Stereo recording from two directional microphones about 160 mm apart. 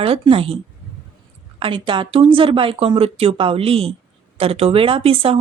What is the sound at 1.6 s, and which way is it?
Speech, 30° right (ahead or behind).